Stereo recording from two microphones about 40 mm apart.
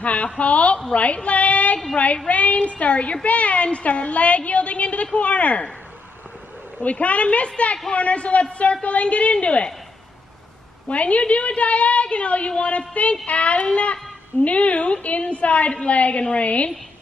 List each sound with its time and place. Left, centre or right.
0.0 s a woman's voice: left
6.8 s a woman's voice: left
10.9 s a woman's voice: left